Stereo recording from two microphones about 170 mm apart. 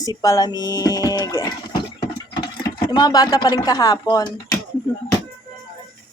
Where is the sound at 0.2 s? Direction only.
20° left (ahead or behind).